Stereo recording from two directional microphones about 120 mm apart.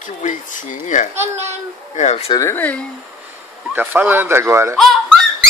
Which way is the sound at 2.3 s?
25° left (ahead or behind).